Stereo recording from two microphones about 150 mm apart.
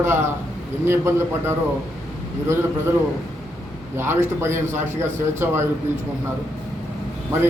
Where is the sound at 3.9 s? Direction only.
15° right (ahead or behind).